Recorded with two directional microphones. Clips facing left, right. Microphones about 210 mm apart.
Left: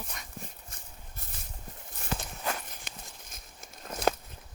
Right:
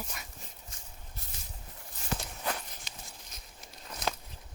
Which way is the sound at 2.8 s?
50° left (ahead or behind).